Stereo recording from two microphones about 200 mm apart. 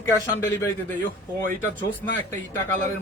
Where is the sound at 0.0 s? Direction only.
15° left (ahead or behind).